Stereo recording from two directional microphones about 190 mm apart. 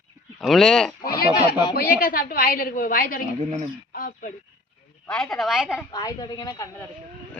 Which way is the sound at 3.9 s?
45° left (ahead or behind).